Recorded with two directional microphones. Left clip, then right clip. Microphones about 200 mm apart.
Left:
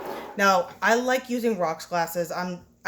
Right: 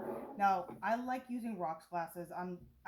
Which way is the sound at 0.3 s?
45° left (ahead or behind).